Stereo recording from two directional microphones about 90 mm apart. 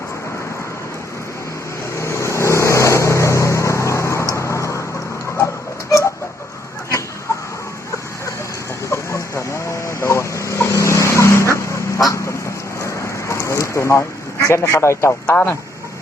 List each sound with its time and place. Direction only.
2.0 s vehicle: 30° left (ahead or behind)
8.9 s chicken: 35° left (ahead or behind)
12.8 s a sound: 30° left (ahead or behind)
14.4 s a man's voice: 30° left (ahead or behind)
15.3 s speech: 20° left (ahead or behind)